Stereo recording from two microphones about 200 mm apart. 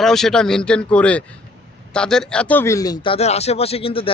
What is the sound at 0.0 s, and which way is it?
A man's voice, centre (ahead or behind).